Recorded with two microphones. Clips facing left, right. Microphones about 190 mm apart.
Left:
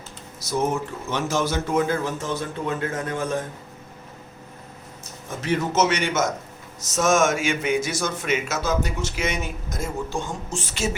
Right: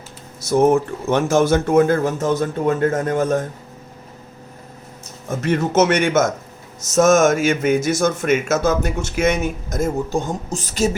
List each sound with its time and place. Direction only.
0.4 s speech: 55° right (ahead or behind)
5.3 s speech: 45° right (ahead or behind)